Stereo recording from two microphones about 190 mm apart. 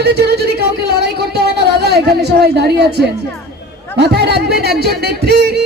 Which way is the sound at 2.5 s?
60° right (ahead or behind).